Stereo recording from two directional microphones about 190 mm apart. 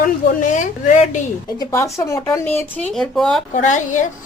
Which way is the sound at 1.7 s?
15° left (ahead or behind).